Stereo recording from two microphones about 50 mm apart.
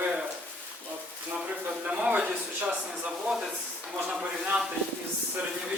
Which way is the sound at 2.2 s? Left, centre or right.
Right.